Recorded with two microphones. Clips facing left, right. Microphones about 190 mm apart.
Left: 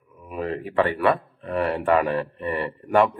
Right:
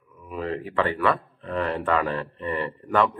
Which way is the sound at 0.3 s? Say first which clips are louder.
Left 1 dB; 20° left (ahead or behind).